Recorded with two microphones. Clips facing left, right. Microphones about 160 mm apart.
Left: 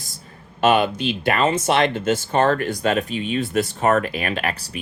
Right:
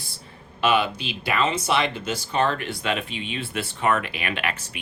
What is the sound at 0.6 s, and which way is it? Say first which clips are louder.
Speech: left 5 dB; 50° left (ahead or behind).